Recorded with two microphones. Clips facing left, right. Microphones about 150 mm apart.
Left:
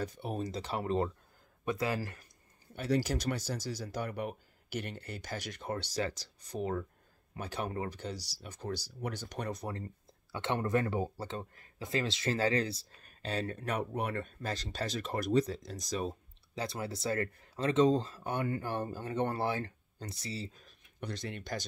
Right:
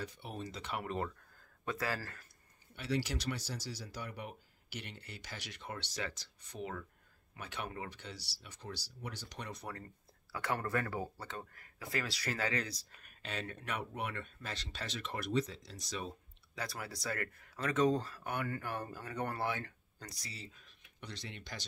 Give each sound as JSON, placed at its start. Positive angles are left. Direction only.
{"t": 0.0, "sound": "speech", "side_deg": 45}
{"t": 1.6, "sound": "speech", "side_deg": 20}
{"t": 2.7, "sound": "speech", "side_deg": 45}
{"t": 10.3, "sound": "speech", "side_deg": 25}
{"t": 16.5, "sound": "speech", "side_deg": 25}